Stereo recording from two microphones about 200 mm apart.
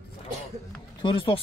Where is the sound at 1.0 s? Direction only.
25° left (ahead or behind).